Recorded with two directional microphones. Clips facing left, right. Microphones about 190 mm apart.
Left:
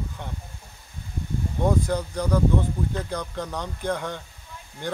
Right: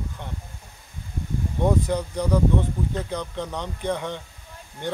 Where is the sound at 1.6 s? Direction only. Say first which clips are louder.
Right 1 dB; centre (ahead or behind).